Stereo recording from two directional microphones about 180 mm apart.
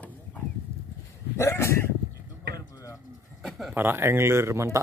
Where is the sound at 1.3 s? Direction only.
15° left (ahead or behind).